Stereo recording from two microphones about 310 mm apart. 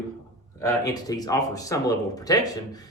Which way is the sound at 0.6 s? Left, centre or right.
Centre.